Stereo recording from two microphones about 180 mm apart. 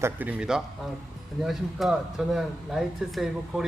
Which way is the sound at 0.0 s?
10° right (ahead or behind).